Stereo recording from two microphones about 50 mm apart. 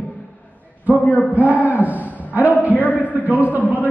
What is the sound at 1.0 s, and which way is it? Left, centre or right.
Speech, left.